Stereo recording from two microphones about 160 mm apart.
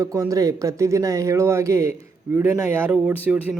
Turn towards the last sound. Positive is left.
turn(degrees=-10)  # may be behind; listen again after turning